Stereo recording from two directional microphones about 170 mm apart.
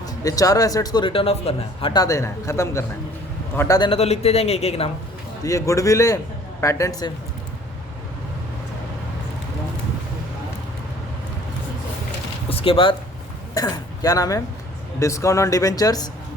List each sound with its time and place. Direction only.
0.0 s speech: 20° left (ahead or behind)
3.8 s a man's voice: 35° left (ahead or behind)
5.4 s speech: 20° left (ahead or behind)
12.5 s speech: 35° left (ahead or behind)